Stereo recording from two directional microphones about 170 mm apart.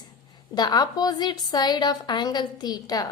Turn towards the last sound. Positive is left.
turn(degrees=20)  # may be behind; listen again after turning